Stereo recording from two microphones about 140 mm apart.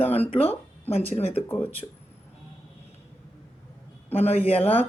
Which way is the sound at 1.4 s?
15° left (ahead or behind).